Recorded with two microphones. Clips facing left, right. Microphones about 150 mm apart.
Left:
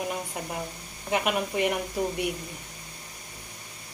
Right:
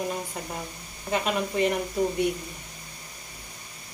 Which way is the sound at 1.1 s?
15° left (ahead or behind).